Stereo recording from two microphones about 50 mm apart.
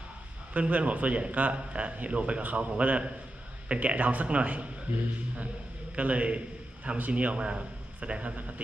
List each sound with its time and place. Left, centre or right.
0.5 s a man's voice: right